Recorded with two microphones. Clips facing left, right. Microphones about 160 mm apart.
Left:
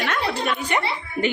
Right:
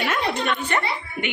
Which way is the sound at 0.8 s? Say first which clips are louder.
Left 3 dB; 30° left (ahead or behind).